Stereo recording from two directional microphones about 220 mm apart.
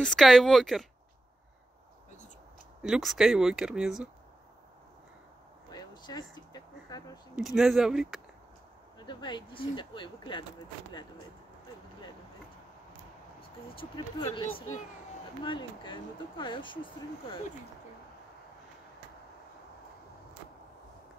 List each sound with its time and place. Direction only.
0.0 s speech: centre (ahead or behind)
2.8 s speech: centre (ahead or behind)
5.7 s a sound: 20° left (ahead or behind)
7.3 s speech: centre (ahead or behind)
9.0 s speech: 20° left (ahead or behind)
13.4 s speech: 25° left (ahead or behind)
15.4 s speech: 20° left (ahead or behind)